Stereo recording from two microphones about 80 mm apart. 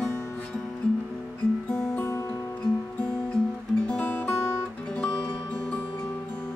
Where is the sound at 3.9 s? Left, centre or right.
Centre.